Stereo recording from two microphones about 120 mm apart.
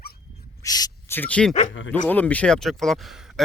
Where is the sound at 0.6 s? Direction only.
35° left (ahead or behind).